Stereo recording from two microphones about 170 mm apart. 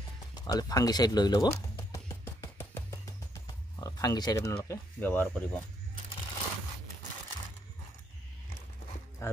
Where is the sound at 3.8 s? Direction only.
20° left (ahead or behind).